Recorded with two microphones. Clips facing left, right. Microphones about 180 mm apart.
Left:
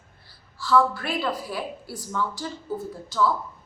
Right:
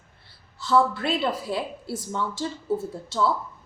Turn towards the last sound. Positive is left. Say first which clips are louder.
# even
turn(degrees=-25)  # may be behind; listen again after turning